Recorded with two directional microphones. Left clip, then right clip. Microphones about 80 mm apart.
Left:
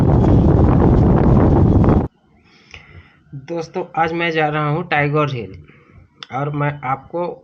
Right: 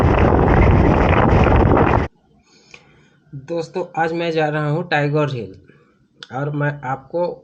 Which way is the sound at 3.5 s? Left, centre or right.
Centre.